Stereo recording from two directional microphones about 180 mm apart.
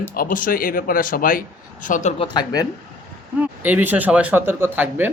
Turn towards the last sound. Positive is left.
turn(degrees=-10)  # may be behind; listen again after turning